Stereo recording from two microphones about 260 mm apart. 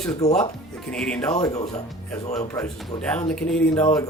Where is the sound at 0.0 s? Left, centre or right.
Centre.